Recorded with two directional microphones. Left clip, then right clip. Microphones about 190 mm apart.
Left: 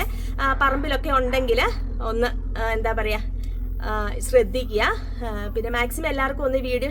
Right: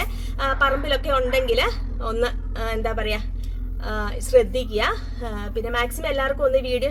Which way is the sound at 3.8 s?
20° left (ahead or behind).